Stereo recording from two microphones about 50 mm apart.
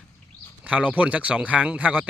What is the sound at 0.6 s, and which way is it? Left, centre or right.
Speech, right.